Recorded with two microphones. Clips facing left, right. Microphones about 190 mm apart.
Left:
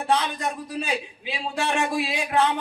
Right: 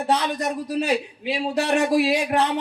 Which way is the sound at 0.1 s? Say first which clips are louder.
Right 1 dB; 40° right (ahead or behind).